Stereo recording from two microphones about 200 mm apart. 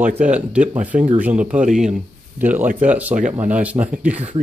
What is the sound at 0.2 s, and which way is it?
Speech, 5° right (ahead or behind).